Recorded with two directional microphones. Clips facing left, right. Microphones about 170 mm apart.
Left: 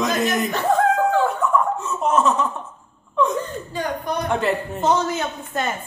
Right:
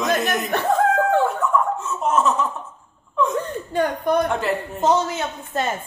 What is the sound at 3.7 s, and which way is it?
Speech, 55° right (ahead or behind).